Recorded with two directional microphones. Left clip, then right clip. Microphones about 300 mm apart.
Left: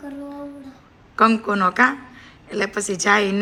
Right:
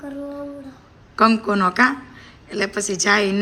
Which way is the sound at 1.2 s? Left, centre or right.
Centre.